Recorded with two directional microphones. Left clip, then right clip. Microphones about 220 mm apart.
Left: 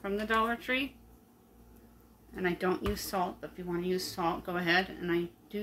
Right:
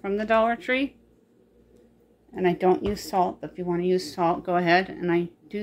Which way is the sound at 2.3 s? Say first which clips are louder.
Right 10 dB; 30° right (ahead or behind).